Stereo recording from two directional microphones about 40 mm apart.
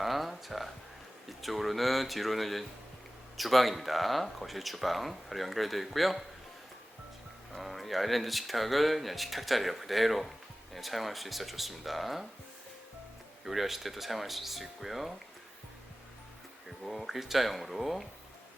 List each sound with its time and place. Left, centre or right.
0.0 s speech: centre
7.5 s speech: centre
13.4 s speech: centre
16.8 s speech: centre